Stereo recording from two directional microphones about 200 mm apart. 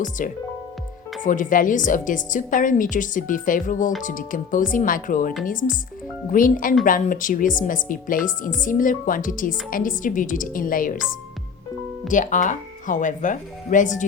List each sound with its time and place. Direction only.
0.2 s a woman's voice: 45° left (ahead or behind)
12.0 s a woman's voice: 40° left (ahead or behind)